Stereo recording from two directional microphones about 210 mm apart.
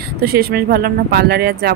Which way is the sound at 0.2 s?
45° right (ahead or behind).